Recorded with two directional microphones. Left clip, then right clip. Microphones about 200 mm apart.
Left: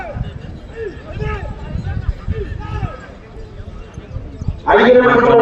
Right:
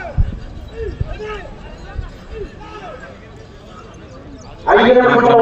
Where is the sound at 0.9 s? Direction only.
Centre (ahead or behind).